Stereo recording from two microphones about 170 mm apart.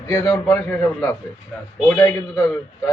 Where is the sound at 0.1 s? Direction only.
15° left (ahead or behind).